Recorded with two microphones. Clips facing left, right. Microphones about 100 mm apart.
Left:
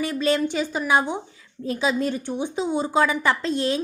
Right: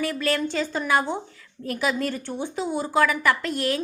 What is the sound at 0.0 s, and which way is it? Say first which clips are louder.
A woman's voice: left 3 dB; 20° left (ahead or behind).